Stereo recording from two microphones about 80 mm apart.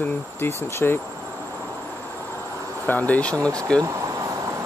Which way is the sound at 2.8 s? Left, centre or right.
Left.